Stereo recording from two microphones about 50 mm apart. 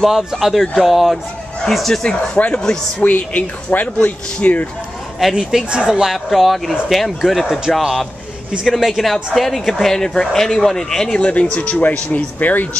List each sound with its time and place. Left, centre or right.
0.0 s a woman's voice: centre
2.3 s speech: left
5.3 s speech: centre
6.0 s a woman's voice: centre
11.1 s speech: left